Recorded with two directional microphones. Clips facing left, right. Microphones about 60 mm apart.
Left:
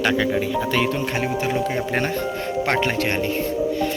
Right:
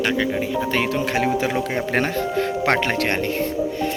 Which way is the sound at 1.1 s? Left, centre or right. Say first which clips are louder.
Right 2 dB; right.